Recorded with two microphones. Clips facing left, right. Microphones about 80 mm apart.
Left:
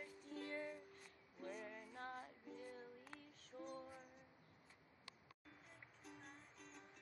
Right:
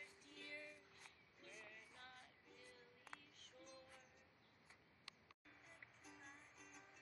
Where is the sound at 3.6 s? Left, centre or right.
Left.